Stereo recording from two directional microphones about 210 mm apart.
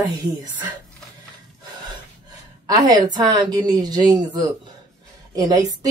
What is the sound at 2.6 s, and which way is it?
A woman's voice, 20° right (ahead or behind).